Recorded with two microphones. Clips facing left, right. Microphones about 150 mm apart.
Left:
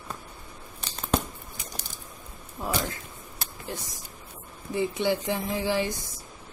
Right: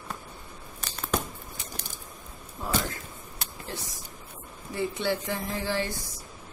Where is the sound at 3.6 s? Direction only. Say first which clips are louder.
Left 2 dB; 15° left (ahead or behind).